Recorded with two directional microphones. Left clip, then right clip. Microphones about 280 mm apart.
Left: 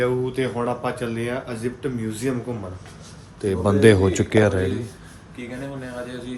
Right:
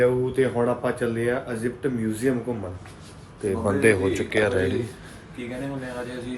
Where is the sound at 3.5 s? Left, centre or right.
Left.